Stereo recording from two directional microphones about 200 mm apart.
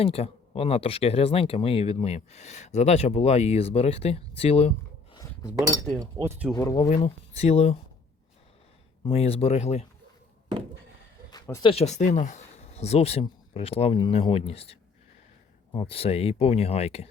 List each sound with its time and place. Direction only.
0.0 s speech: 30° left (ahead or behind)
6.0 s speech: 15° right (ahead or behind)
6.5 s speech: 15° left (ahead or behind)
6.8 s speech: 30° left (ahead or behind)
9.0 s speech: 30° left (ahead or behind)
11.3 s a sound: 15° left (ahead or behind)
11.7 s speech: 35° left (ahead or behind)